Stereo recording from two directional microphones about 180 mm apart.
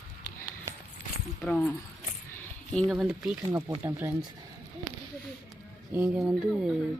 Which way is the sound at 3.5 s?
15° right (ahead or behind).